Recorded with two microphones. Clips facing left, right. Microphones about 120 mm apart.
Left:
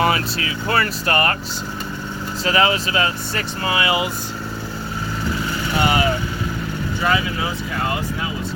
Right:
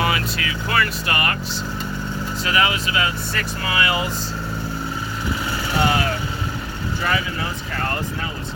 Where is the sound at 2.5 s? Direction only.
35° left (ahead or behind).